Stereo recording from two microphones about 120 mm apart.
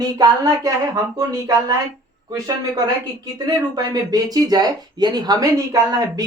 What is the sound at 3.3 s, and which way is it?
Speech, 35° right (ahead or behind).